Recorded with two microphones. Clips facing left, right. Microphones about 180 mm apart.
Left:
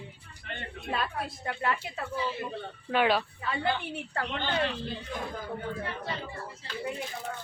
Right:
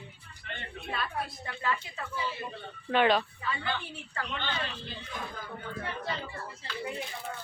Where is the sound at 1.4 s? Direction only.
55° left (ahead or behind).